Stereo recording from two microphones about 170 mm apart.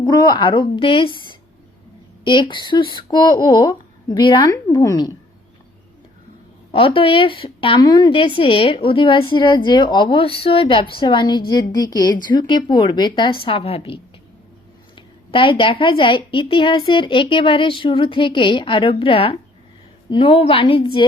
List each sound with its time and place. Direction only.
0.0 s speech: 25° left (ahead or behind)
6.7 s a woman's voice: 30° left (ahead or behind)